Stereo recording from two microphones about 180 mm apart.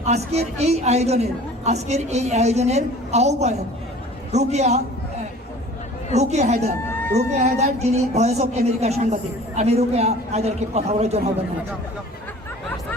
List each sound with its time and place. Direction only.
0.0 s a woman's voice: 35° right (ahead or behind)
6.1 s a woman's voice: 40° right (ahead or behind)